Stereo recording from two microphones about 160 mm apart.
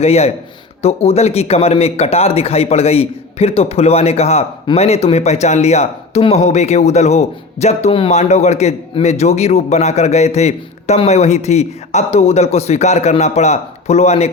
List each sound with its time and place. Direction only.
0.0 s a man's voice: 40° left (ahead or behind)